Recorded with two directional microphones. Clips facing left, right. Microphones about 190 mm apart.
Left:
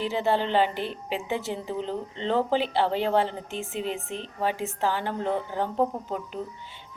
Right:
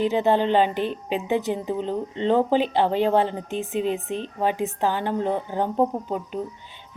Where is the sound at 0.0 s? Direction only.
20° right (ahead or behind).